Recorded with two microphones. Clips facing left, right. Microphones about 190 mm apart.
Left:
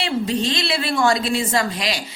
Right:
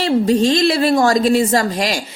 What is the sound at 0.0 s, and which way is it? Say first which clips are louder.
A woman's voice: right 8 dB; 40° right (ahead or behind).